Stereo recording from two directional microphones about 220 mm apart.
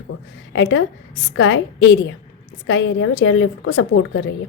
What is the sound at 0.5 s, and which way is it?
A woman's voice, 60° left (ahead or behind).